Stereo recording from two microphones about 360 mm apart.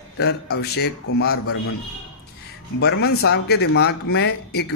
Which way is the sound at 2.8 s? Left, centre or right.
Left.